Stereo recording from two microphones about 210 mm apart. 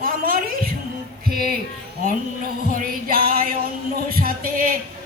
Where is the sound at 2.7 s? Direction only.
45° right (ahead or behind).